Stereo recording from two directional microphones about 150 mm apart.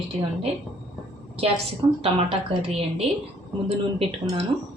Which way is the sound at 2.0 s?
40° right (ahead or behind).